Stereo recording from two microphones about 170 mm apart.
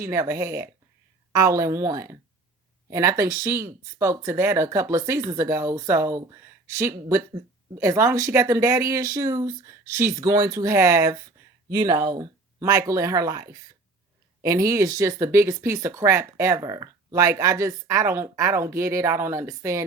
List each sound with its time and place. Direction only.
0.0 s speech: 15° right (ahead or behind)